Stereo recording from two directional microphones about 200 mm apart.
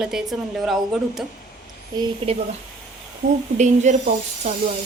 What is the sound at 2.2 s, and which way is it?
Speech, 25° right (ahead or behind).